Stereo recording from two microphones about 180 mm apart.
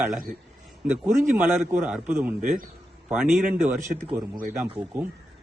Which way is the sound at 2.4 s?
50° right (ahead or behind).